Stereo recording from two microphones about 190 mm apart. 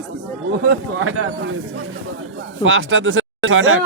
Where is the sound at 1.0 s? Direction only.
90° right.